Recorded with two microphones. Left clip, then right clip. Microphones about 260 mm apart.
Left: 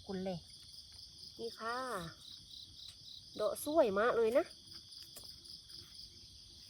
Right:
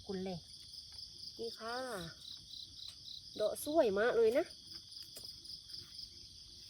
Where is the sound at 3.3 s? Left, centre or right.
Left.